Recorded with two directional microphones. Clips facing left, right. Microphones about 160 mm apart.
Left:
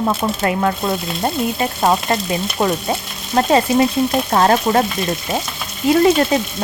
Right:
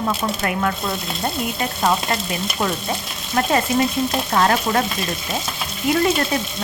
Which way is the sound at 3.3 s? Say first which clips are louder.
Left 5 dB; 30° left (ahead or behind).